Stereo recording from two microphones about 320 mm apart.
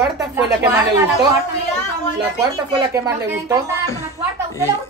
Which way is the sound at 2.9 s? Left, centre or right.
Centre.